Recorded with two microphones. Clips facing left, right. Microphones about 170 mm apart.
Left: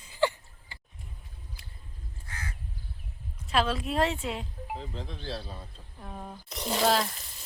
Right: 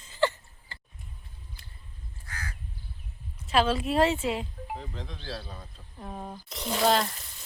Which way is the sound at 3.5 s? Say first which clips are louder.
Right 3 dB; centre (ahead or behind).